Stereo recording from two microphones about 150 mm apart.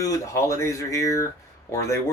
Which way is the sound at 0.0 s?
20° left (ahead or behind).